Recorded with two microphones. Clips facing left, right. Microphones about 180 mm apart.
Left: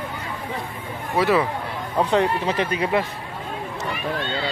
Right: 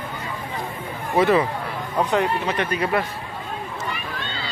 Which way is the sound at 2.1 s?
30° left (ahead or behind).